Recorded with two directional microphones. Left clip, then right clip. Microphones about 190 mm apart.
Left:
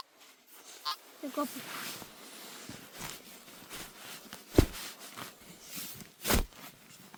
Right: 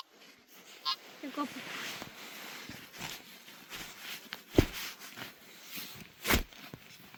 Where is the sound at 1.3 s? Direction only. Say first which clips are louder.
Left 2 dB; 45° left (ahead or behind).